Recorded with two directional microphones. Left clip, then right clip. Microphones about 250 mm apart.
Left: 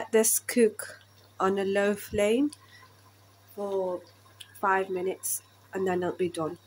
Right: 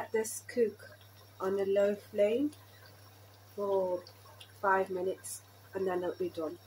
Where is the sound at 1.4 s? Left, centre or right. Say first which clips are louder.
Left 4 dB; left.